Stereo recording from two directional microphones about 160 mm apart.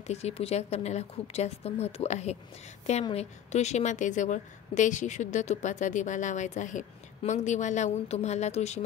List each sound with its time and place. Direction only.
0.0 s a woman's voice: 40° left (ahead or behind)